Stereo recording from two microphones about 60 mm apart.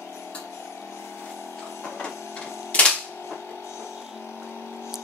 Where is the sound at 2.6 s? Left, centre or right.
Left.